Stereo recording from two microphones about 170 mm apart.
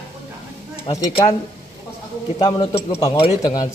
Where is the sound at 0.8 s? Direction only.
35° left (ahead or behind).